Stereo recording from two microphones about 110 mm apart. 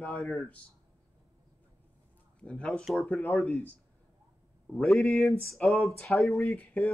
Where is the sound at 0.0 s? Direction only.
15° left (ahead or behind).